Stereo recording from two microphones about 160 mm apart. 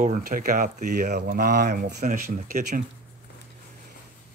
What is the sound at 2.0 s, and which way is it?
Speech, 60° right (ahead or behind).